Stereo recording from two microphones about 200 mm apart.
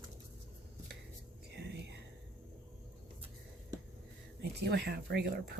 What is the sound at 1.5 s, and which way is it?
Whispering, 60° right (ahead or behind).